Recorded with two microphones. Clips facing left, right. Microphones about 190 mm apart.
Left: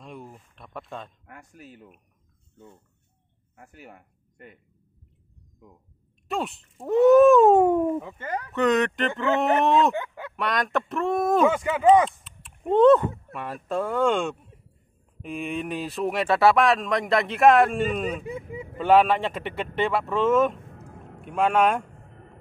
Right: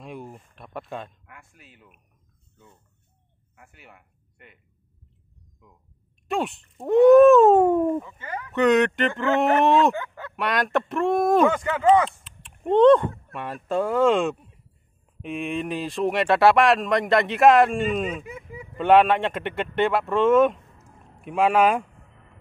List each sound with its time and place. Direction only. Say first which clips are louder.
0.0 s a sound: right 3 dB; centre (ahead or behind)
1.2 s speech: left 5 dB; 40° left (ahead or behind)
3.5 s speech: left 5 dB; 40° left (ahead or behind)
6.2 s speech: right 3 dB; centre (ahead or behind)
8.0 s speech: left 3 dB; 55° left (ahead or behind)
8.5 s speech: right 3 dB; centre (ahead or behind)
9.9 s fowl: left 1 dB; 15° left (ahead or behind)
10.3 s speech: right 2 dB; centre (ahead or behind)
12.2 s speech: right 2 dB; centre (ahead or behind)
18.2 s speech: left 5 dB; 25° left (ahead or behind)
18.8 s speech: right 2 dB; centre (ahead or behind)
20.6 s a sound: left 8 dB; 60° left (ahead or behind)
21.2 s speech: right 2 dB; 5° right (ahead or behind)
22.1 s music: left 6 dB; 45° left (ahead or behind)